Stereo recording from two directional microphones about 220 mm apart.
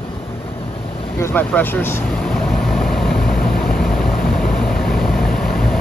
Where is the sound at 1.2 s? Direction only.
10° left (ahead or behind).